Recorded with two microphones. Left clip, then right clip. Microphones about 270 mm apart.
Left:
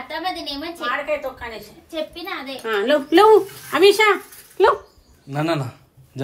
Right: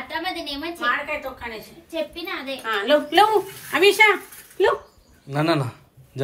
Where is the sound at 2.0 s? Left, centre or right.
Centre.